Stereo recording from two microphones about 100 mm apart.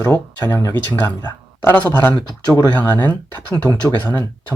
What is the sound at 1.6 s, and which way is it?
Speech, 15° left (ahead or behind).